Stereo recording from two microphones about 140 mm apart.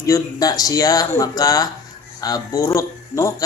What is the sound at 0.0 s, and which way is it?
Speech, 25° left (ahead or behind).